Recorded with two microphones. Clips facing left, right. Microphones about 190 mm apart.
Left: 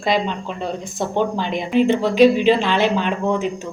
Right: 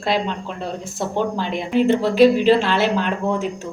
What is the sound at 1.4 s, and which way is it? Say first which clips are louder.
A woman's voice: even; 5° right (ahead or behind).